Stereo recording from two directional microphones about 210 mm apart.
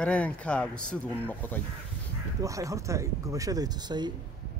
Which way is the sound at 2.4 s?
15° right (ahead or behind).